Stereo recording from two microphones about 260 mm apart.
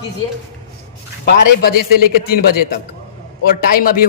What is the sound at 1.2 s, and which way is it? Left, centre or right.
A man's voice, left.